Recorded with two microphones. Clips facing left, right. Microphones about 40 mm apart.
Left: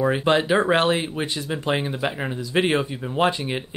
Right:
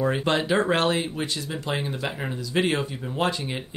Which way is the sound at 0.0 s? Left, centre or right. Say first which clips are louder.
Left 4 dB; centre.